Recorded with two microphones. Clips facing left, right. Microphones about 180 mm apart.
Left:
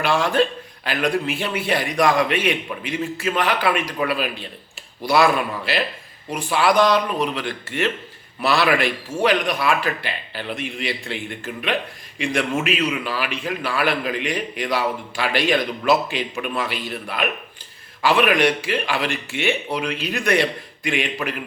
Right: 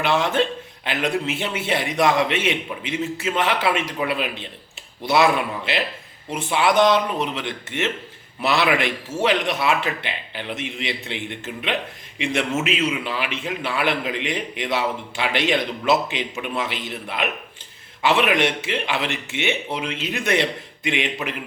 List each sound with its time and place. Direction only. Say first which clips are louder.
0.0 s a man's voice: left 1 dB; 20° right (ahead or behind)